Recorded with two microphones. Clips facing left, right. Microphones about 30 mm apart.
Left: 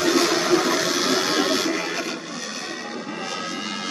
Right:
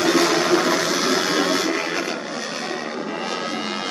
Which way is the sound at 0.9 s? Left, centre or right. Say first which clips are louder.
Right 1 dB; centre.